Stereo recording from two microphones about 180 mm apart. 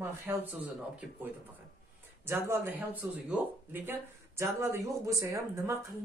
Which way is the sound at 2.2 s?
10° right (ahead or behind).